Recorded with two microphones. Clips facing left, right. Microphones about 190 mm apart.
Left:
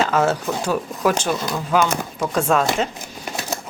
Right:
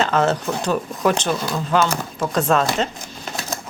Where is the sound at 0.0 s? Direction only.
10° left (ahead or behind).